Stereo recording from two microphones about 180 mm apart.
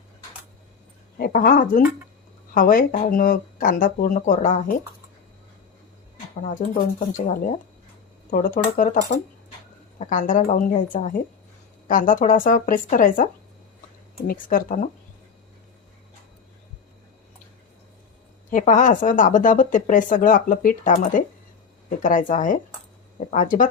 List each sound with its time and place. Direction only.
1.2 s speech: 55° left (ahead or behind)
6.4 s speech: 45° left (ahead or behind)
18.5 s speech: 45° left (ahead or behind)